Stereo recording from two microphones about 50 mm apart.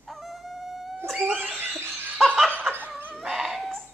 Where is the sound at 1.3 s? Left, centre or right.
Right.